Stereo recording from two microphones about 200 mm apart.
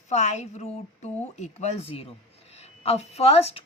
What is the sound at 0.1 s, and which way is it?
A woman's voice, 35° left (ahead or behind).